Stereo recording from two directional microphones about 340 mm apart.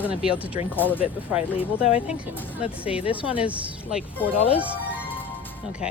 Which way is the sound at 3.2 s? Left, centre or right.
Centre.